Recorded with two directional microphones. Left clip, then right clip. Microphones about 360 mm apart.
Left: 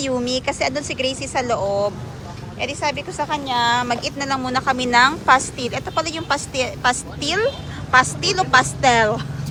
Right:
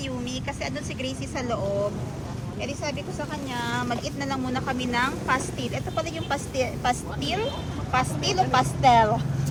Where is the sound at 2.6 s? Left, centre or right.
Centre.